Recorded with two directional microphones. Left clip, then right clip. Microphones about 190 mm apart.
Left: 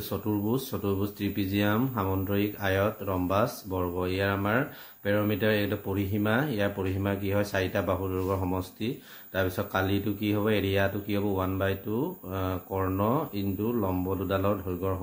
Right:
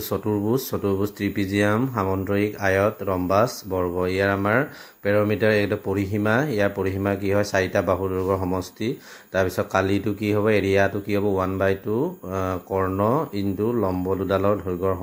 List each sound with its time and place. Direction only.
0.1 s speech: 30° right (ahead or behind)